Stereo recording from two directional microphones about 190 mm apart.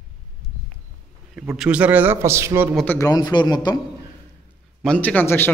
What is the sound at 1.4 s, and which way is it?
A man's voice, 5° right (ahead or behind).